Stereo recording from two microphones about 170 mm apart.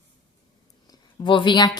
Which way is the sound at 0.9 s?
30° left (ahead or behind).